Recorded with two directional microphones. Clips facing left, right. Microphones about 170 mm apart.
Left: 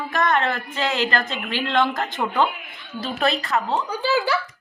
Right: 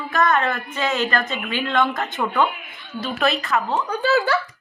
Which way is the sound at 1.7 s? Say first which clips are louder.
Even; 25° left (ahead or behind).